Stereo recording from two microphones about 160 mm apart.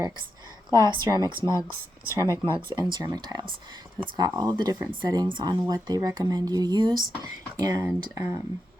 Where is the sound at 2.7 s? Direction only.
25° right (ahead or behind).